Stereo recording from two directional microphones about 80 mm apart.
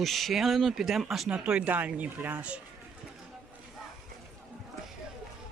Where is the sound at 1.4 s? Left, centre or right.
Centre.